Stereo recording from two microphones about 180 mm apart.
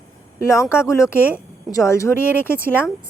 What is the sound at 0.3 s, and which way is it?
Speech, 15° left (ahead or behind).